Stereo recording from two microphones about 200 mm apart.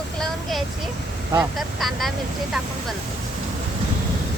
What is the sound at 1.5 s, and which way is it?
Speech, centre (ahead or behind).